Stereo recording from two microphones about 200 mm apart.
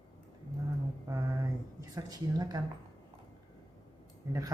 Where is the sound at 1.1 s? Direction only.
20° right (ahead or behind).